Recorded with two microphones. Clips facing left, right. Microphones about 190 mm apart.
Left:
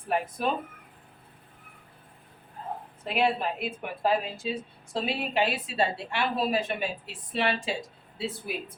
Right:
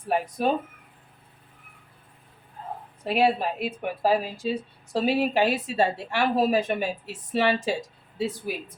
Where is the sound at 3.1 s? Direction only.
35° right (ahead or behind).